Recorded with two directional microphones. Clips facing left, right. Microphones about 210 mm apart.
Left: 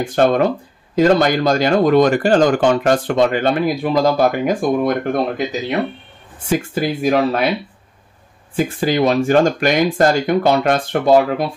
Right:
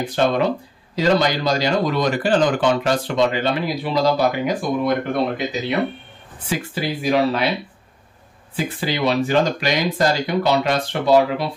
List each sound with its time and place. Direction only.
0.0 s speech: 50° left (ahead or behind)
6.4 s speech: 45° left (ahead or behind)
8.5 s speech: 45° left (ahead or behind)